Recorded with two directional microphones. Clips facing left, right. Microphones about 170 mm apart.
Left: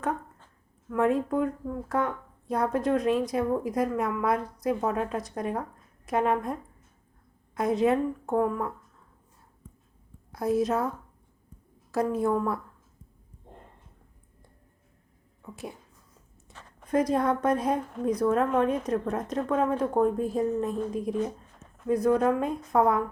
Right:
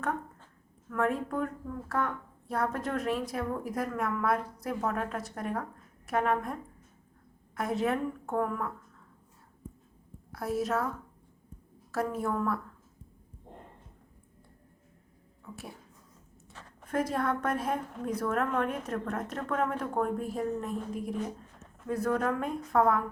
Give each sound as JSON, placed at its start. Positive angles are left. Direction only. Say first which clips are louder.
{"t": 0.9, "sound": "a woman's voice", "louder": "left 5 dB", "side_deg": 20}
{"t": 10.3, "sound": "a woman's voice", "louder": "left 5 dB", "side_deg": 20}
{"t": 11.9, "sound": "a woman's voice", "louder": "left 6 dB", "side_deg": 15}
{"t": 15.4, "sound": "a sound", "louder": "left 2 dB", "side_deg": 15}
{"t": 16.8, "sound": "a woman's voice", "louder": "left 6 dB", "side_deg": 15}